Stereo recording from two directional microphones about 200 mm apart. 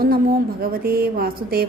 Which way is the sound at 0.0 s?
45° right (ahead or behind).